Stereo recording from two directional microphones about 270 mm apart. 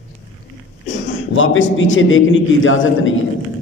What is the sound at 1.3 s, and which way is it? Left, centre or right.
A man's voice, left.